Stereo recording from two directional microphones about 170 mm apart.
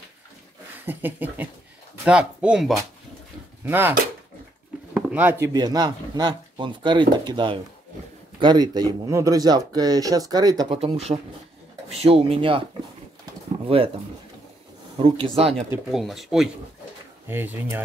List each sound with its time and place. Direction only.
0.8 s speech: 10° right (ahead or behind)
4.9 s a sound: 10° right (ahead or behind)
5.5 s speech: 25° right (ahead or behind)
10.8 s speech: 35° right (ahead or behind)
13.7 s speech: 35° right (ahead or behind)
15.0 s speech: 35° right (ahead or behind)
15.9 s speech: centre (ahead or behind)
17.3 s speech: 10° right (ahead or behind)